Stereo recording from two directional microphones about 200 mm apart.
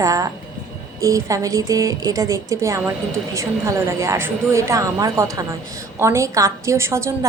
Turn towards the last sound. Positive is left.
turn(degrees=-15)  # may be behind; listen again after turning